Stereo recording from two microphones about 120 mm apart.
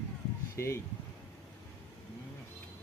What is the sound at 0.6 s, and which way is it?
Speech, 20° left (ahead or behind).